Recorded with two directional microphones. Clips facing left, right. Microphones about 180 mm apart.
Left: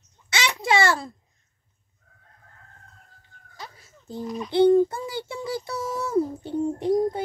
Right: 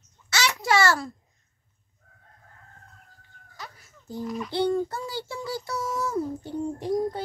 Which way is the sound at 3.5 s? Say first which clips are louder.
Left 1 dB; 25° left (ahead or behind).